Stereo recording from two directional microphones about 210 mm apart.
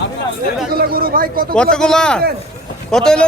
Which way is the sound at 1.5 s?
5° left (ahead or behind).